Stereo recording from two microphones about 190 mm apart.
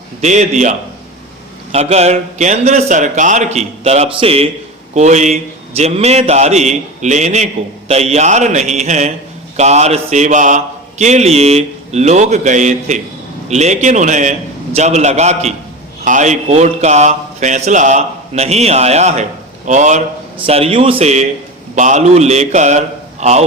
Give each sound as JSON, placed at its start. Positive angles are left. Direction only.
{"t": 0.2, "sound": "speech", "side_deg": -40}
{"t": 1.7, "sound": "speech", "side_deg": -35}